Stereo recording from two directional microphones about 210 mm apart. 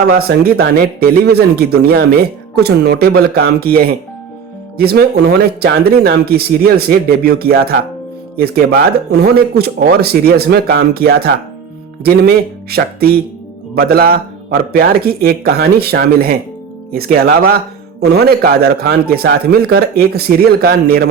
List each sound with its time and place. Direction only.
0.1 s speech: 45° right (ahead or behind)
12.7 s speech: 45° right (ahead or behind)